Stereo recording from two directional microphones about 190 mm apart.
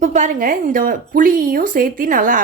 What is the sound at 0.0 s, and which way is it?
A woman's voice, 40° right (ahead or behind).